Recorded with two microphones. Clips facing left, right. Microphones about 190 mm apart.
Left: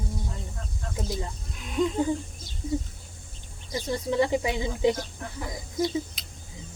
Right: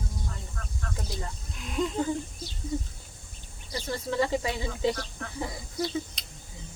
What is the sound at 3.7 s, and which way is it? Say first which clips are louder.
Speech: left 4 dB; 20° left (ahead or behind).